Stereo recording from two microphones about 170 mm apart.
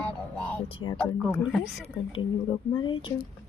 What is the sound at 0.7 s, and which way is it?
Speech, 30° left (ahead or behind).